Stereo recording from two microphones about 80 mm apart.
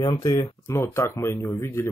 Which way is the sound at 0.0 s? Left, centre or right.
Left.